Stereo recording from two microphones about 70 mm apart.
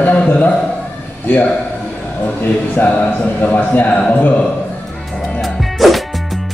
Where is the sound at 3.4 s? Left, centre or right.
Left.